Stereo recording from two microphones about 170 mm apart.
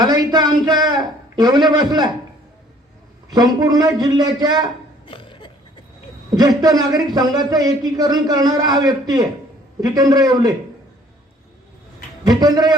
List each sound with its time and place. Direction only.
0.0 s a man's voice: 25° right (ahead or behind)
3.2 s a man's voice: 20° right (ahead or behind)
5.0 s a sound: 30° left (ahead or behind)
6.3 s a man's voice: 20° right (ahead or behind)
12.2 s a man's voice: 25° right (ahead or behind)